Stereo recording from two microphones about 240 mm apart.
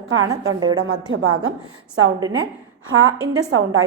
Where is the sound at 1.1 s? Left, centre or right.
Right.